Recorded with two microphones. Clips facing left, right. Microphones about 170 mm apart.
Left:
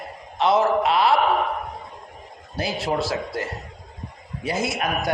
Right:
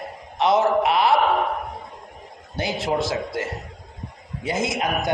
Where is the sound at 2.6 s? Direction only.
20° right (ahead or behind).